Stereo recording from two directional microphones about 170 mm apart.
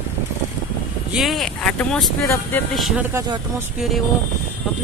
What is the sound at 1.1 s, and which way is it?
Speech, centre (ahead or behind).